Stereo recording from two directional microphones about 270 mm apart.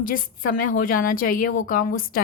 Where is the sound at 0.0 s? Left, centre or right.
Left.